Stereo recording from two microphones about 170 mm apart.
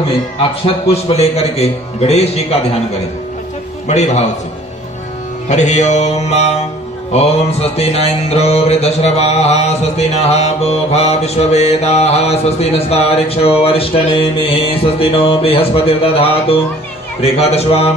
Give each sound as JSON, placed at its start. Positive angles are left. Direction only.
{"t": 0.7, "sound": "mantra", "side_deg": 35}
{"t": 3.8, "sound": "music", "side_deg": 40}
{"t": 5.5, "sound": "music", "side_deg": 45}
{"t": 7.1, "sound": "mantra", "side_deg": 40}